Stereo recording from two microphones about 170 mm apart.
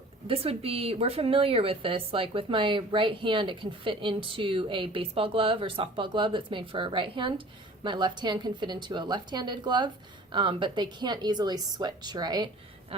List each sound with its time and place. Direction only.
0.3 s a woman's voice: 35° right (ahead or behind)